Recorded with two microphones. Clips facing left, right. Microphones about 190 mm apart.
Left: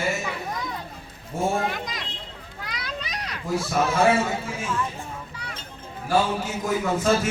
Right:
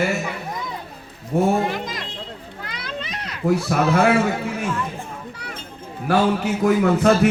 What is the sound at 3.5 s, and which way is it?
Speech, 65° right (ahead or behind).